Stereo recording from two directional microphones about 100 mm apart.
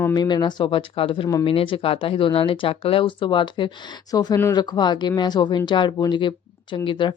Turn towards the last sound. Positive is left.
turn(degrees=55)  # may be behind; listen again after turning